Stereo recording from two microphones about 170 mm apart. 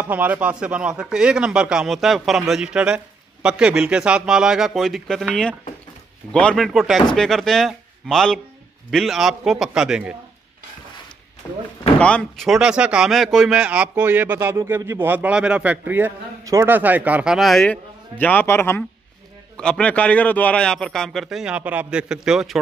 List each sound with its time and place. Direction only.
0.0 s a man's voice: 10° right (ahead or behind)
11.4 s a sound: 15° left (ahead or behind)
12.0 s a man's voice: 5° left (ahead or behind)